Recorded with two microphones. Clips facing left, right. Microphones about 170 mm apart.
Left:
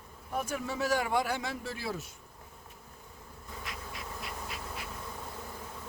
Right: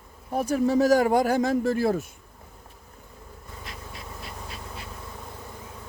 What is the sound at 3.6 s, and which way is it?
Insect, 30° right (ahead or behind).